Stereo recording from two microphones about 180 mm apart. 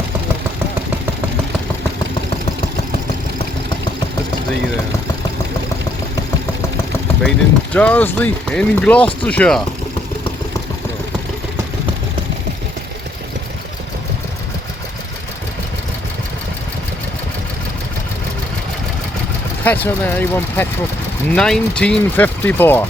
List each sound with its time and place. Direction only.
7.2 s speech: 5° left (ahead or behind)
19.6 s speech: 10° left (ahead or behind)